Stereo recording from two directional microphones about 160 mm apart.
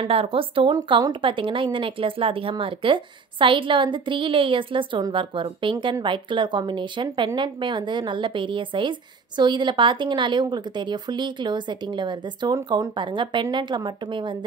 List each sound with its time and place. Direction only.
0.0 s a woman's voice: 35° right (ahead or behind)